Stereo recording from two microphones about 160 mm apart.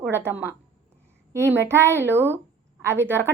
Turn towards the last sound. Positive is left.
turn(degrees=-15)  # may be behind; listen again after turning